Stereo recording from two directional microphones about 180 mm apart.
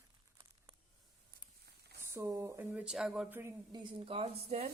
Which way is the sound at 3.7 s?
30° right (ahead or behind).